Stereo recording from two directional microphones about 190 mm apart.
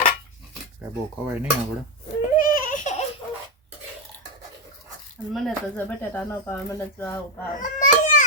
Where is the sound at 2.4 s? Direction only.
40° left (ahead or behind).